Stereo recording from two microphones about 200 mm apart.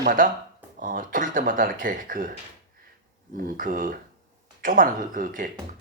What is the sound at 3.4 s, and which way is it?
Speech, 45° right (ahead or behind).